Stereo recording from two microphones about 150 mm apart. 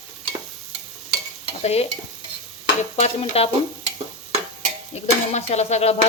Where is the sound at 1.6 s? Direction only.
45° left (ahead or behind).